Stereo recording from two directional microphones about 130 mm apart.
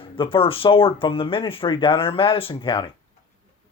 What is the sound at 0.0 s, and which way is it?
Speech, 40° left (ahead or behind).